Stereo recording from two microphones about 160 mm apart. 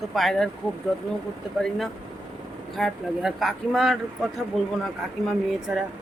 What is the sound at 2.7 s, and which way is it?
Speech, centre (ahead or behind).